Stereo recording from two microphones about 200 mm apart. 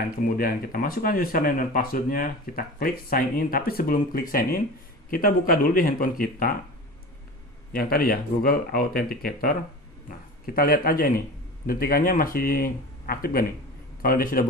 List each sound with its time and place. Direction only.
0.4 s speech: 45° left (ahead or behind)
7.7 s speech: 50° left (ahead or behind)